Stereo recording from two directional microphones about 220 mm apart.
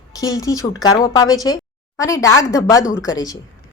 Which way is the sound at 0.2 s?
15° left (ahead or behind).